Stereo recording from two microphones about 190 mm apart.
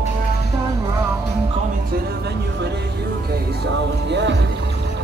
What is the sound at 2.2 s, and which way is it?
Speech, 60° right (ahead or behind).